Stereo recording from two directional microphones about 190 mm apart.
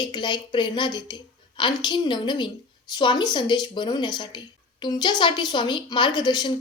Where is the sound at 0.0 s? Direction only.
25° left (ahead or behind).